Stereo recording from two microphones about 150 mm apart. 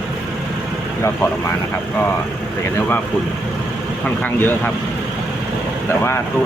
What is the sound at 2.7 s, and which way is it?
Speech, 10° left (ahead or behind).